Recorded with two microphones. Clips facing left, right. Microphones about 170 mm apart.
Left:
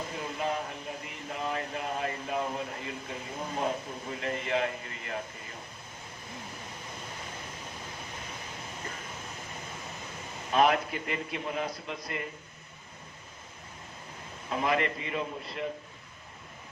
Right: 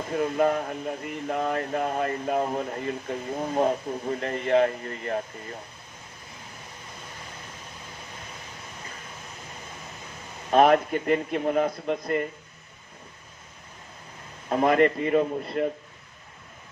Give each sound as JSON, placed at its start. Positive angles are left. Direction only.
{"t": 0.1, "sound": "speech", "side_deg": -55}
{"t": 10.5, "sound": "speech", "side_deg": -45}
{"t": 14.5, "sound": "speech", "side_deg": -45}